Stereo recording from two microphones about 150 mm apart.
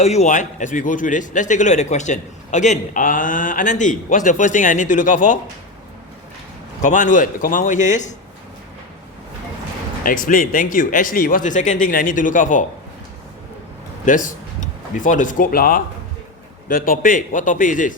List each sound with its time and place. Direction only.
0.0 s a man's voice: 50° left (ahead or behind)
6.8 s a man's voice: 55° left (ahead or behind)
10.0 s a man's voice: 65° left (ahead or behind)
14.0 s a man's voice: 60° left (ahead or behind)